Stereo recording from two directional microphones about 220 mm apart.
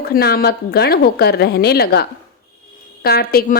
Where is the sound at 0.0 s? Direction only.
45° left (ahead or behind).